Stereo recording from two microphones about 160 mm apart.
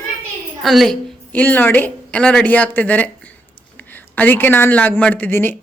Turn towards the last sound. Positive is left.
turn(degrees=10)  # may be behind; listen again after turning